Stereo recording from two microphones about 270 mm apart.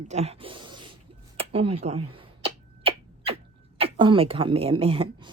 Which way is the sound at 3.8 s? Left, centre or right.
Centre.